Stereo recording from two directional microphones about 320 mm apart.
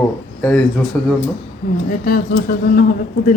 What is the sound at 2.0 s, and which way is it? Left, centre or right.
Speech, left.